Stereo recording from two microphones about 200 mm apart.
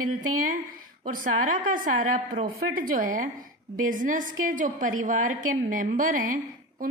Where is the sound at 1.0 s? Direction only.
45° right (ahead or behind).